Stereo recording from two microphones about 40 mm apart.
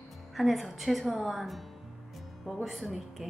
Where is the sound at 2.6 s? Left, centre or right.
Centre.